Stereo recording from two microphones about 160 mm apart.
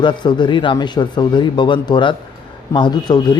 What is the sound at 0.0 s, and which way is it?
Speech, 30° left (ahead or behind).